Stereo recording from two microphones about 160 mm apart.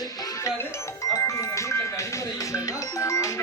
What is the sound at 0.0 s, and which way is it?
Music, 25° left (ahead or behind).